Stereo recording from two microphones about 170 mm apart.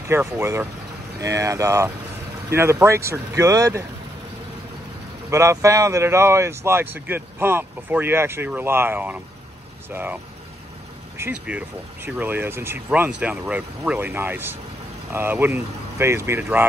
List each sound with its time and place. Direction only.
0.1 s speech: 15° right (ahead or behind)
5.3 s speech: 15° right (ahead or behind)